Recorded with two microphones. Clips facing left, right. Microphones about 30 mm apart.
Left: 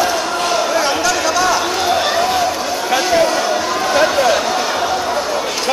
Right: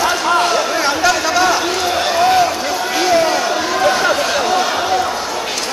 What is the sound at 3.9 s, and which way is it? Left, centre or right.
Chatter, centre.